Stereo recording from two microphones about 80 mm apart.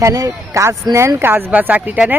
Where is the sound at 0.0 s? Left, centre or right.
Right.